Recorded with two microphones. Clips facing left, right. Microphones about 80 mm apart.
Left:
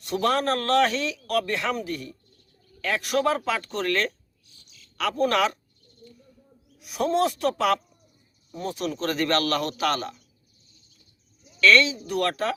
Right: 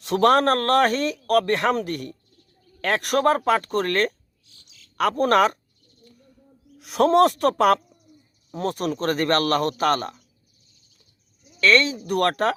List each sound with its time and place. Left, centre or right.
0.0 s a man's voice: right
6.7 s a man's voice: right
8.4 s speech: right
8.8 s a man's voice: right
11.6 s speech: right